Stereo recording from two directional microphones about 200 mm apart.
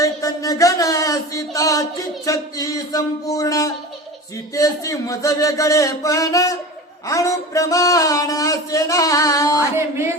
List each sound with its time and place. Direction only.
0.0 s music: 15° left (ahead or behind)
2.2 s speech: 15° left (ahead or behind)
9.7 s music: 10° right (ahead or behind)